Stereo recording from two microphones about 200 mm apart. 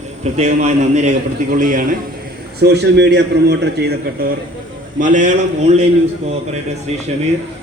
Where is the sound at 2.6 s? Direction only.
55° right (ahead or behind).